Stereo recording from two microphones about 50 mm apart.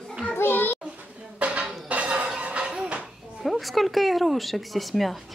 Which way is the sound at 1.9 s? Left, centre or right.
Right.